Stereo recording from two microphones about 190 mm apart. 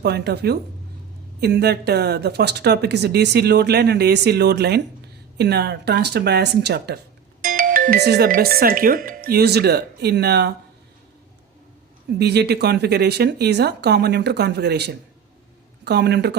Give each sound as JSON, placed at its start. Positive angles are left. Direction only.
{"t": 0.0, "sound": "speech", "side_deg": -60}
{"t": 7.4, "sound": "speech", "side_deg": -50}
{"t": 12.2, "sound": "speech", "side_deg": -60}